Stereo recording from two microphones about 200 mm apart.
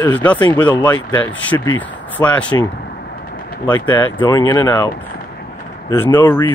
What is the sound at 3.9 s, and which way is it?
Speech, 20° left (ahead or behind).